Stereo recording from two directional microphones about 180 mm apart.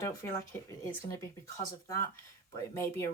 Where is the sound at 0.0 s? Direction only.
15° left (ahead or behind).